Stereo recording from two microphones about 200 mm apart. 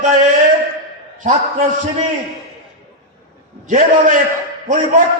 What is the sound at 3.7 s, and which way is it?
Speech, 40° right (ahead or behind).